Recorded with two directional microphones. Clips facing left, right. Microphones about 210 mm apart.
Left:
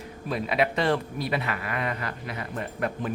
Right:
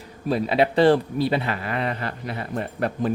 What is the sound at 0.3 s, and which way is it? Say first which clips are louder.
Speech: right 5 dB; 30° right (ahead or behind).